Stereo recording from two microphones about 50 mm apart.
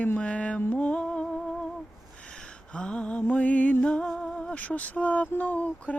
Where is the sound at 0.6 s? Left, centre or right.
Left.